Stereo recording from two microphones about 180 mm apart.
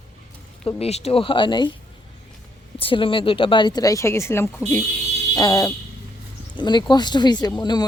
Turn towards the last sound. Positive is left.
turn(degrees=25)  # may be behind; listen again after turning